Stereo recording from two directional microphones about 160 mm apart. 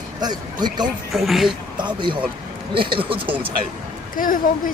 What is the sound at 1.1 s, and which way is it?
Speech, centre (ahead or behind).